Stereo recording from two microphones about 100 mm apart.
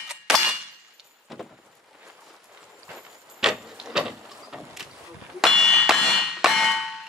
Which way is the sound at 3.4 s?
5° right (ahead or behind).